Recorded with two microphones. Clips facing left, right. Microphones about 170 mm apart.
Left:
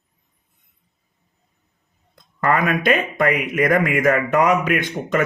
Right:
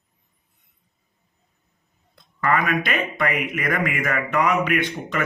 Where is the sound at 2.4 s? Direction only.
45° left (ahead or behind).